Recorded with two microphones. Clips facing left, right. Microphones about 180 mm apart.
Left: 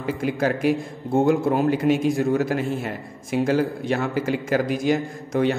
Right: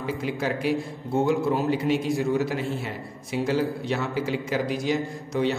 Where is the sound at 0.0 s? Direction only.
50° left (ahead or behind).